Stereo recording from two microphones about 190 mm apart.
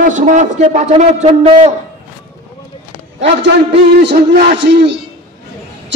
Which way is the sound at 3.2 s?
70° right (ahead or behind).